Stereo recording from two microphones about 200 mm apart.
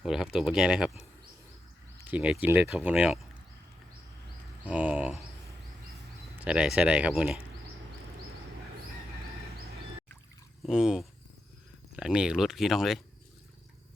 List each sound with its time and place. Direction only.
0.0 s speech: centre (ahead or behind)
2.0 s speech: 5° right (ahead or behind)
4.6 s speech: 5° right (ahead or behind)
6.4 s speech: 5° right (ahead or behind)
10.6 s speech: 5° right (ahead or behind)